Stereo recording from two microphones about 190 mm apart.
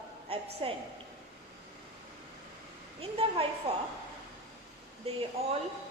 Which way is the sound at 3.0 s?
30° right (ahead or behind).